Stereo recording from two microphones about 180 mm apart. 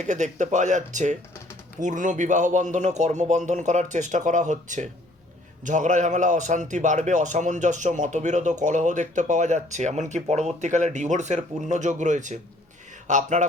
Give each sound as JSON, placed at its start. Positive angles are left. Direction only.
{"t": 0.0, "sound": "a man's voice", "side_deg": -40}